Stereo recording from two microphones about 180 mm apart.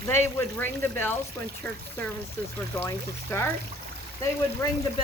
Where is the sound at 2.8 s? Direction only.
15° left (ahead or behind).